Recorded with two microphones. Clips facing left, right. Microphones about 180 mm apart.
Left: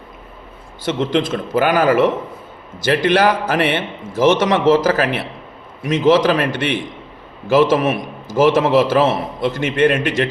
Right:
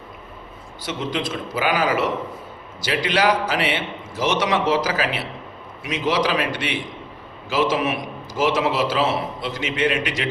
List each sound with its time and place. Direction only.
0.8 s a man's voice: 50° left (ahead or behind)